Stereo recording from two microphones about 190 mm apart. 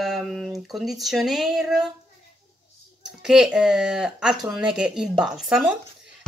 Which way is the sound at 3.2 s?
5° right (ahead or behind).